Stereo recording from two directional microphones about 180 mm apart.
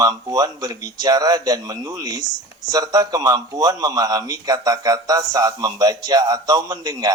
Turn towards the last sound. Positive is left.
turn(degrees=-20)  # may be behind; listen again after turning